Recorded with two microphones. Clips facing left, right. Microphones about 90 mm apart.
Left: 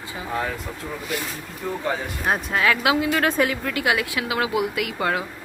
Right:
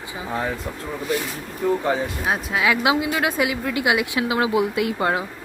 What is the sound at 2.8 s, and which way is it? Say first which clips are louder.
Speech: even; 20° right (ahead or behind).